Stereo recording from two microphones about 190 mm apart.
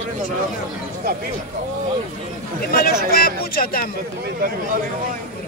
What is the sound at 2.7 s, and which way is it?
Speech, 50° left (ahead or behind).